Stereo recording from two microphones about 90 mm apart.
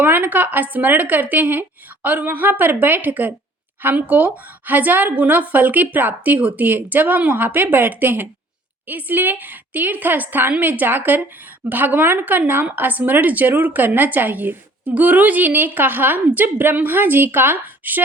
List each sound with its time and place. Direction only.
0.0 s a woman's voice: 20° right (ahead or behind)